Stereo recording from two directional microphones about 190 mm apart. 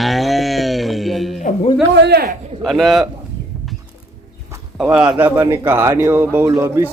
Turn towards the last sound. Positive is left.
turn(degrees=-15)  # may be behind; listen again after turning